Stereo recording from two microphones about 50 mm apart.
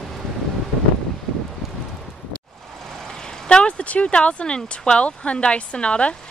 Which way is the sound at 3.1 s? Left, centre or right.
Centre.